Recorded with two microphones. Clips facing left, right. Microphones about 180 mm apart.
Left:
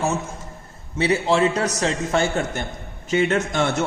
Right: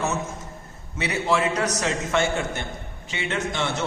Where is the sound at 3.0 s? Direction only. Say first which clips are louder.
Left 8 dB; 45° left (ahead or behind).